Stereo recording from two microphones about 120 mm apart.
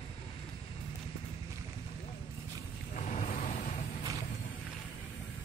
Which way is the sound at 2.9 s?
90° left.